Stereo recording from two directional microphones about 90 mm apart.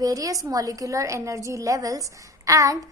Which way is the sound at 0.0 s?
40° right (ahead or behind).